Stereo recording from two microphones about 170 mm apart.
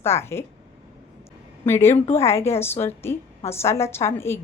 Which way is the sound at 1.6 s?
15° left (ahead or behind).